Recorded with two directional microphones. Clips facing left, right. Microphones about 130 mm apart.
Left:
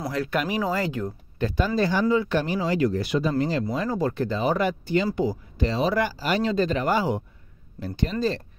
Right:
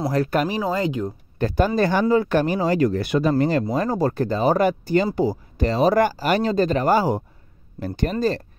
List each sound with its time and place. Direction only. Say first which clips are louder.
0.1 s speech: right 5 dB; 40° right (ahead or behind)
0.6 s speech: right 3 dB; 20° right (ahead or behind)
1.4 s speech: right 4 dB; 45° right (ahead or behind)
2.9 s speech: right 4 dB; 60° right (ahead or behind)
3.7 s speech: right 4 dB; 45° right (ahead or behind)
5.6 s speech: right 6 dB; 45° right (ahead or behind)